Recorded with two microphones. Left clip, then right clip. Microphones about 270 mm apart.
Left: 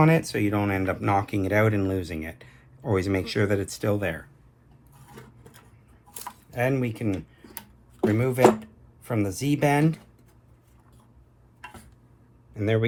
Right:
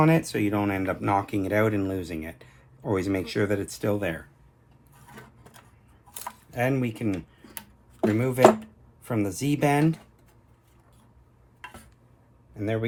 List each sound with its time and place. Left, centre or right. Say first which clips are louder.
0.0 s speech: left 1 dB; left
6.6 s speech: left 1 dB; left